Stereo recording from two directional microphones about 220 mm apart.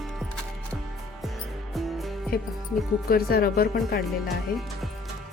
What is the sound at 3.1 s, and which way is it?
Speech, 45° left (ahead or behind).